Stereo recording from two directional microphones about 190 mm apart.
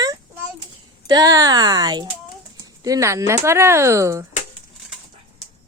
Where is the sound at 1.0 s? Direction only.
20° right (ahead or behind).